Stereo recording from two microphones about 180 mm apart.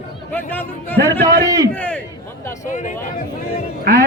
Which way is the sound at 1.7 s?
10° left (ahead or behind).